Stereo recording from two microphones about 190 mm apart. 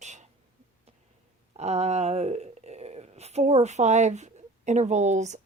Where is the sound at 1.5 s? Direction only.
35° right (ahead or behind).